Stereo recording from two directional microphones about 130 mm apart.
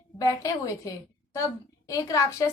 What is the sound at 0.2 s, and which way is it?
Speech, 25° left (ahead or behind).